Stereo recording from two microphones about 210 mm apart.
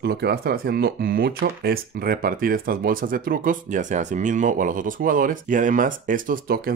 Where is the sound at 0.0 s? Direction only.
50° right (ahead or behind).